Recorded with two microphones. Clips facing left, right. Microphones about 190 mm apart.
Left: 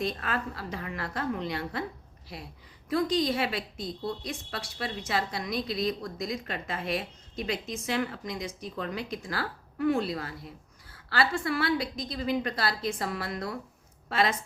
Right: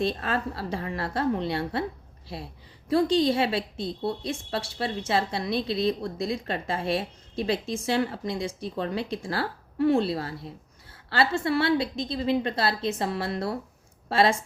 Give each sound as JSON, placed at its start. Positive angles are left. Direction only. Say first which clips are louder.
{"t": 0.0, "sound": "a woman's voice", "louder": "right 4 dB", "side_deg": -30}